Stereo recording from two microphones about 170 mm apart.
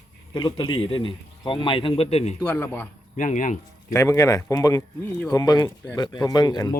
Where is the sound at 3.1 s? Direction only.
50° left (ahead or behind).